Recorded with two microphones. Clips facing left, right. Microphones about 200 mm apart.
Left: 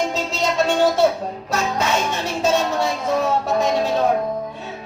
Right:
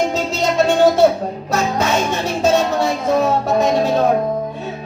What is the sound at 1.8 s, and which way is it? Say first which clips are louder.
Music: right 3 dB; 45° right (ahead or behind).